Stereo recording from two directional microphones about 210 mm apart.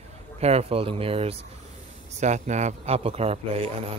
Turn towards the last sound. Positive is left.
turn(degrees=-30)  # may be behind; listen again after turning